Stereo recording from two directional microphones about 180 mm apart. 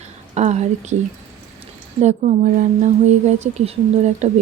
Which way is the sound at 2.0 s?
40° right (ahead or behind).